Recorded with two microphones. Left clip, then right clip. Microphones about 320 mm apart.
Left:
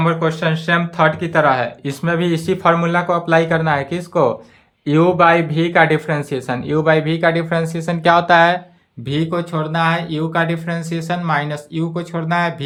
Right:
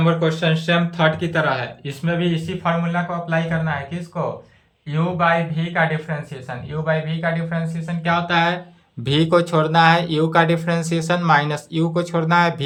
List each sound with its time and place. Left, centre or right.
0.0 s speech: centre
9.0 s speech: centre